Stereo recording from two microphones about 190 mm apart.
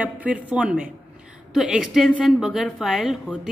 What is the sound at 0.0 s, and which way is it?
A woman's voice, 10° right (ahead or behind).